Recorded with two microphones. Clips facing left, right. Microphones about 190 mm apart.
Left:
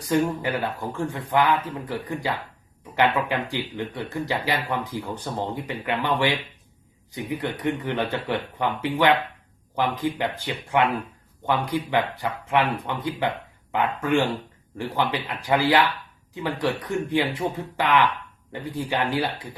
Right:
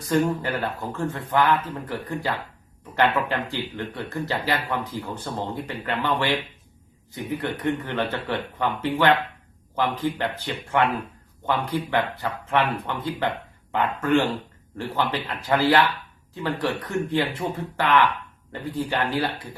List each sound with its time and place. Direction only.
0.0 s speech: 15° left (ahead or behind)